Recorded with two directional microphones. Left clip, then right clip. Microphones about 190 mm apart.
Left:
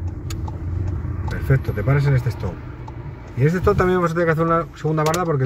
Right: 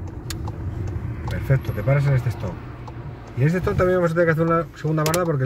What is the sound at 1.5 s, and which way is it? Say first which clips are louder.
Speech: left 1 dB; 20° left (ahead or behind).